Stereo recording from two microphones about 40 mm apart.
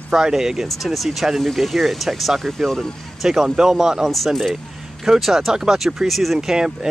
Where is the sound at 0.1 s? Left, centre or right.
Centre.